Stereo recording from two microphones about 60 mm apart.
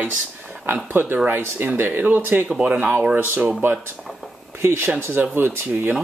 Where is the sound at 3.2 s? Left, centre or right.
Right.